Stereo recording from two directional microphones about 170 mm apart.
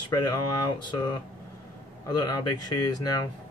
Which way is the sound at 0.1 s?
25° left (ahead or behind).